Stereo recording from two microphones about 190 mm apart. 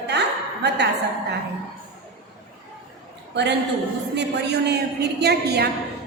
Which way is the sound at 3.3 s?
65° right (ahead or behind).